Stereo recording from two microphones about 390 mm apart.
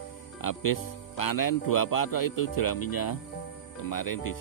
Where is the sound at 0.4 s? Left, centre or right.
Left.